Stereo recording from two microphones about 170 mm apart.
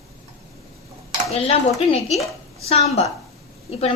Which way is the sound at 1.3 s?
35° left (ahead or behind).